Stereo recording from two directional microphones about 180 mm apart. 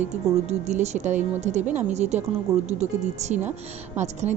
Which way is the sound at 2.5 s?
15° right (ahead or behind).